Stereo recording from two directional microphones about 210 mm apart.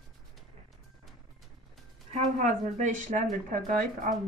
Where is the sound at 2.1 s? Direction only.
35° right (ahead or behind).